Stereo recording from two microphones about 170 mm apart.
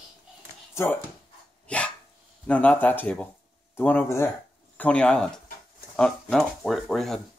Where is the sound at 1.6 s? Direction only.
5° left (ahead or behind).